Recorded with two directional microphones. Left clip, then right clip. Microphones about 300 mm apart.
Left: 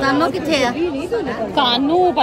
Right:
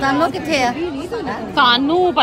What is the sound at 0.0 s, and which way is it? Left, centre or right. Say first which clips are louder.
A woman's voice: even; centre.